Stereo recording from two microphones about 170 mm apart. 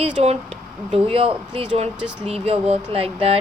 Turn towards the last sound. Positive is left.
turn(degrees=-35)  # may be behind; listen again after turning